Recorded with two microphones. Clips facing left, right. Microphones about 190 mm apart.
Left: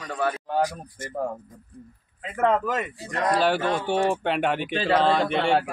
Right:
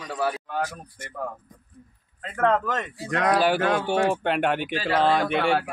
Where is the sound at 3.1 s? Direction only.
80° right.